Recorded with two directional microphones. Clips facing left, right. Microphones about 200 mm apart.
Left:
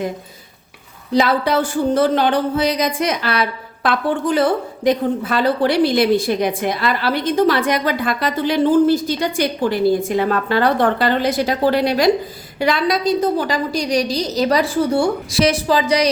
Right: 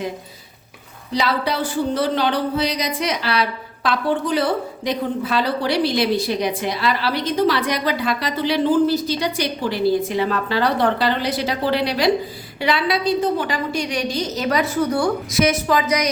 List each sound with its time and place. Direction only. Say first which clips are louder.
1.1 s a woman's voice: left 6 dB; 50° left (ahead or behind); by 16.0 s 30° left (ahead or behind)